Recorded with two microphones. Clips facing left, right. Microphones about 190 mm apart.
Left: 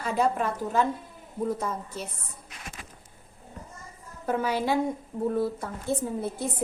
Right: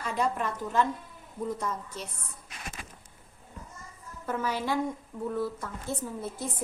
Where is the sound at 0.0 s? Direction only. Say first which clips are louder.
Left 4 dB; 35° left (ahead or behind).